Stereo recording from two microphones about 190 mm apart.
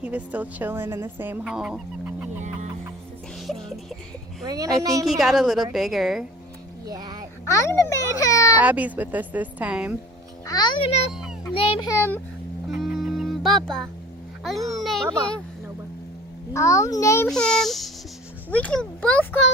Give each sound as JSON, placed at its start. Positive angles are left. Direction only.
{"t": 0.0, "sound": "a woman's voice", "side_deg": -10}
{"t": 3.4, "sound": "music", "side_deg": 0}
{"t": 4.4, "sound": "a woman's voice", "side_deg": -20}
{"t": 5.0, "sound": "a child's voice", "side_deg": 0}
{"t": 6.8, "sound": "speech", "side_deg": -20}
{"t": 7.4, "sound": "a child's voice", "side_deg": 15}
{"t": 8.5, "sound": "a woman's voice", "side_deg": -10}
{"t": 10.4, "sound": "a child's voice", "side_deg": 20}
{"t": 11.1, "sound": "a sound", "side_deg": -5}
{"t": 11.5, "sound": "a child's voice", "side_deg": 30}
{"t": 12.6, "sound": "music", "side_deg": 0}
{"t": 14.7, "sound": "a sound", "side_deg": 0}
{"t": 16.5, "sound": "a child's voice", "side_deg": 15}
{"t": 17.2, "sound": "a child's voice", "side_deg": 0}